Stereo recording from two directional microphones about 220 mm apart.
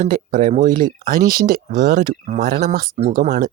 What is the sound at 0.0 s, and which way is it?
A woman's voice, 40° right (ahead or behind).